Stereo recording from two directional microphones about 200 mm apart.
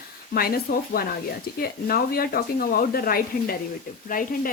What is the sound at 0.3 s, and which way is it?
Speech, 50° left (ahead or behind).